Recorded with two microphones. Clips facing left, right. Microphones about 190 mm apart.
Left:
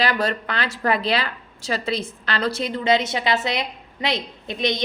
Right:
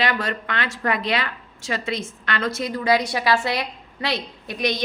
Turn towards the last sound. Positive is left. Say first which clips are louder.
# left 1 dB
turn(degrees=20)  # may be behind; listen again after turning